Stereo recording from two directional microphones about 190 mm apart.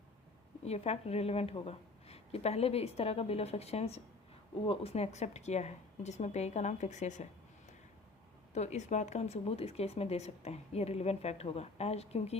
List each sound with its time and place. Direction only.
0.6 s speech: 35° left (ahead or behind)
8.5 s speech: 35° left (ahead or behind)